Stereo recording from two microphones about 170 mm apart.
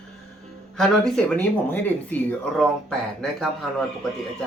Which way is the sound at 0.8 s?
5° left (ahead or behind).